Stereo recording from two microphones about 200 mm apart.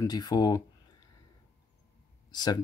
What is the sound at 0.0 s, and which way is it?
Speech, 20° left (ahead or behind).